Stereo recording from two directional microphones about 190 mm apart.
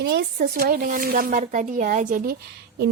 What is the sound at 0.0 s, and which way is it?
A woman's voice, 60° right (ahead or behind).